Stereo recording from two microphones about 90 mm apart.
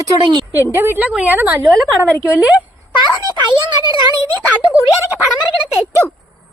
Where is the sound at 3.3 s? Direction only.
55° right (ahead or behind).